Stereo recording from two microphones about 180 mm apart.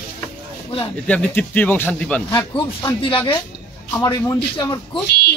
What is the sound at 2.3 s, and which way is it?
Speech, 20° left (ahead or behind).